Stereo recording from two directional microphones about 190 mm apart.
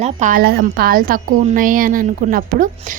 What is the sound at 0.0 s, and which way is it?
A woman's voice, 40° right (ahead or behind).